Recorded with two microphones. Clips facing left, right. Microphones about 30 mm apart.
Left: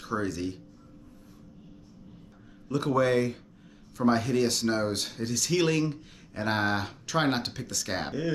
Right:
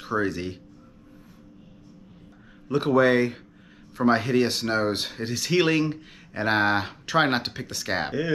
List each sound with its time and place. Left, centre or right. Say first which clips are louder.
0.0 s speech: right 4 dB; right
2.7 s speech: right 5 dB; right